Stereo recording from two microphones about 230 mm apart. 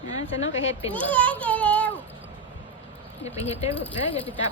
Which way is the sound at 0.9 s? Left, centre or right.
Centre.